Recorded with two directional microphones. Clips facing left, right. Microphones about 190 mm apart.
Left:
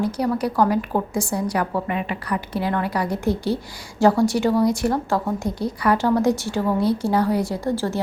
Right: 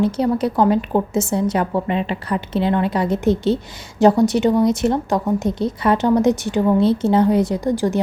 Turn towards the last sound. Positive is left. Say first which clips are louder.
# right 4 dB
turn(degrees=-15)  # may be behind; listen again after turning